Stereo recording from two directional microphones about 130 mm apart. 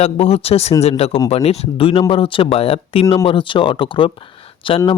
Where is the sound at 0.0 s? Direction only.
50° left (ahead or behind).